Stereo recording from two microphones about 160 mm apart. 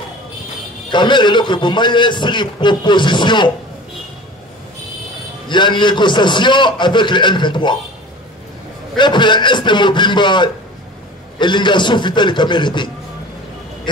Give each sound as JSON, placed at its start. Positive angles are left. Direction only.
{"t": 0.9, "sound": "a man's voice", "side_deg": 30}
{"t": 5.5, "sound": "a man's voice", "side_deg": 30}
{"t": 8.9, "sound": "a man's voice", "side_deg": 30}